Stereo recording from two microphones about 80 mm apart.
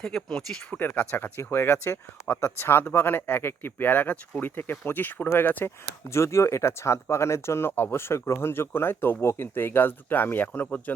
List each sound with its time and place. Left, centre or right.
0.0 s speech: centre; by 10.9 s left